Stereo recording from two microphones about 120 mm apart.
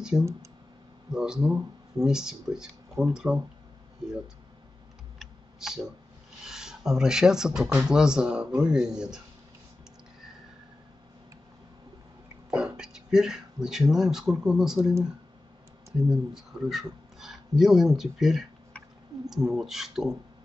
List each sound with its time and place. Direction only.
0.2 s speech: 25° right (ahead or behind)
1.1 s speech: 5° right (ahead or behind)
5.2 s computer keyboard: 5° right (ahead or behind)
6.4 s speech: 5° right (ahead or behind)
12.4 s speech: 5° right (ahead or behind)
16.1 s speech: 5° right (ahead or behind)